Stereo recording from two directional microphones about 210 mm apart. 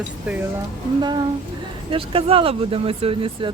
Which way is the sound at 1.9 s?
25° right (ahead or behind).